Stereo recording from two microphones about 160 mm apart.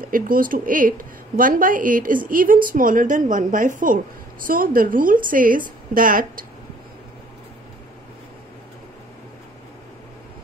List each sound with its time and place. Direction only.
0.0 s a woman's voice: 60° right (ahead or behind)